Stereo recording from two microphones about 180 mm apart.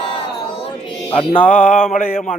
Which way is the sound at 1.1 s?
30° left (ahead or behind).